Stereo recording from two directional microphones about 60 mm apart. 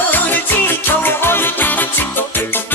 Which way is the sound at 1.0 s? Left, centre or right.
Left.